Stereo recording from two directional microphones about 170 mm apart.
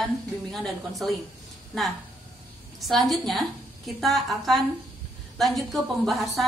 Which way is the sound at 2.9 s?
Centre (ahead or behind).